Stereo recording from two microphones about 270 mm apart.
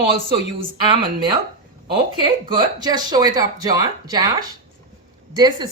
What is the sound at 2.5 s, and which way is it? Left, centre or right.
Speech, centre.